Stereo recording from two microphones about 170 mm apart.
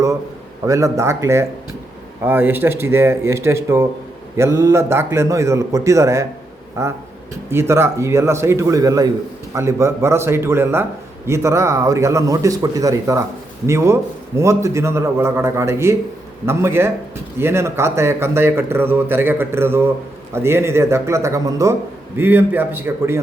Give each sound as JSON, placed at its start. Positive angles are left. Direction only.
{"t": 0.6, "sound": "speech", "side_deg": -20}